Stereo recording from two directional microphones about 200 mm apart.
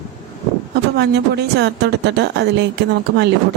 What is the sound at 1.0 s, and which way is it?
Speech, 55° right (ahead or behind).